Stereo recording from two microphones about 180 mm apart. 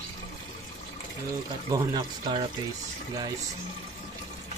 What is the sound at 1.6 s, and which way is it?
Speech, 25° right (ahead or behind).